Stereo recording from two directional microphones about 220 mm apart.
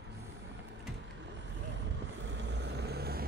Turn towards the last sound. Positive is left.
turn(degrees=-45)  # may be behind; listen again after turning